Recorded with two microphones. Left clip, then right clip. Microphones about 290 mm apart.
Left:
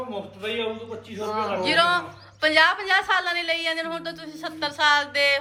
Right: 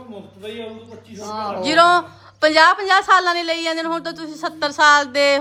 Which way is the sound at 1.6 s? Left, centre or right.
Centre.